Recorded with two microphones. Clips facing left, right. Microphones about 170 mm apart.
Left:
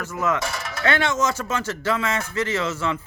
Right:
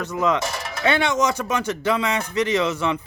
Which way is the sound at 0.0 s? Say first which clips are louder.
Right 3 dB; 15° right (ahead or behind).